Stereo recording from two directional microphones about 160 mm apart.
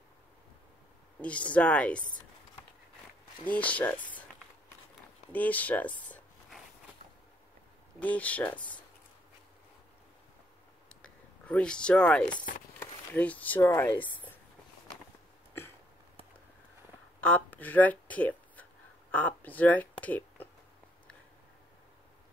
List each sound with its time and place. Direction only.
1.2 s speech: 10° left (ahead or behind)
3.4 s speech: 10° left (ahead or behind)
3.9 s speech: 30° left (ahead or behind)
5.3 s a sound: 10° left (ahead or behind)
8.0 s speech: 10° left (ahead or behind)
10.9 s a sound: 5° left (ahead or behind)
12.7 s speech: 15° left (ahead or behind)
17.2 s speech: 10° left (ahead or behind)